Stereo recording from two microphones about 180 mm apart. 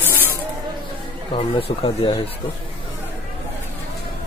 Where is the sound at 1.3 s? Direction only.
30° left (ahead or behind).